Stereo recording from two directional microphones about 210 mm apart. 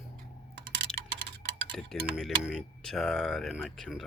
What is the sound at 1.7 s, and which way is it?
Speech, centre (ahead or behind).